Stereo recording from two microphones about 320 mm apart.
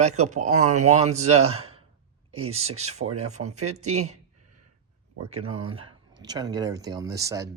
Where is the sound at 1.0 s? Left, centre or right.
Right.